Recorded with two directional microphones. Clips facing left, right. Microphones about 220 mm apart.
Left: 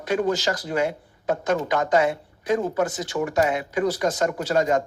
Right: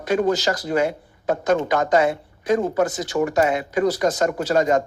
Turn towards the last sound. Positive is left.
turn(degrees=-40)  # may be behind; listen again after turning